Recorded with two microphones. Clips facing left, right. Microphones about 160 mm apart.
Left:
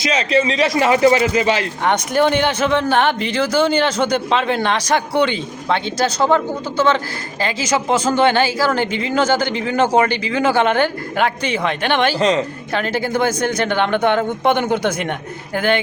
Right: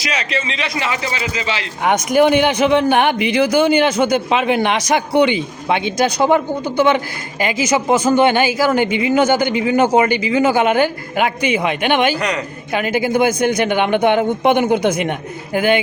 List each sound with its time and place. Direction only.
0.0 s a man's voice: 30° left (ahead or behind); by 1.6 s 50° left (ahead or behind)
1.8 s speech: 10° right (ahead or behind)
12.2 s a woman's voice: 25° left (ahead or behind)
12.7 s speech: 10° right (ahead or behind)